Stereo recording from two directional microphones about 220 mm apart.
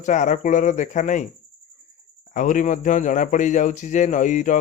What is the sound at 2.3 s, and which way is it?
Speech, 35° left (ahead or behind).